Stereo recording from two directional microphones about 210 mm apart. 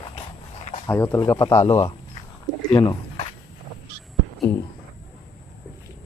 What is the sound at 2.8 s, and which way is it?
Speech, 25° left (ahead or behind).